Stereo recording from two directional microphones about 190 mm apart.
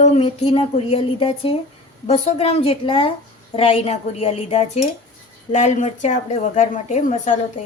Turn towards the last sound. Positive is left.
turn(degrees=40)  # may be behind; listen again after turning